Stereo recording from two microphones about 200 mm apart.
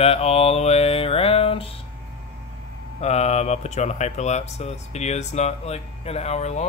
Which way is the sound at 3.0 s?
35° left (ahead or behind).